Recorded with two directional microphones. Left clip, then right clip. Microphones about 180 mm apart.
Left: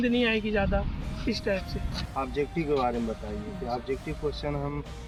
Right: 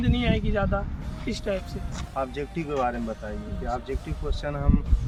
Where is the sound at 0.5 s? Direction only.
25° right (ahead or behind).